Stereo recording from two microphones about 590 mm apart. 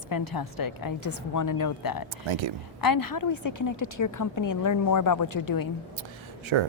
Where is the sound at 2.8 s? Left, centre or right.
Left.